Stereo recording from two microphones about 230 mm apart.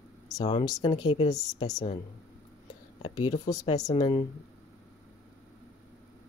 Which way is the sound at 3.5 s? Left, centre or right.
Centre.